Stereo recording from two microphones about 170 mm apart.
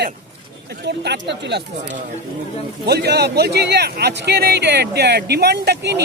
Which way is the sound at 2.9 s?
70° right (ahead or behind).